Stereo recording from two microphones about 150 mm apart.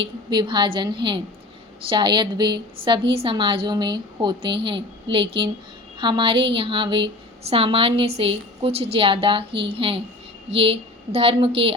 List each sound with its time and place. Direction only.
0.3 s a woman's voice: 30° right (ahead or behind)